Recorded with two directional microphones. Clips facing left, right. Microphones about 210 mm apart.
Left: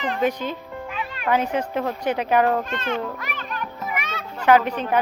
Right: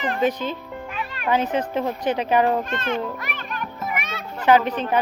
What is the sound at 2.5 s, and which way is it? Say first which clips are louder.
Speech: even; 10° right (ahead or behind).